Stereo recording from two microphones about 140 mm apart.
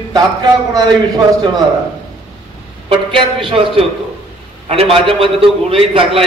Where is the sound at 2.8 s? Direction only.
40° right (ahead or behind).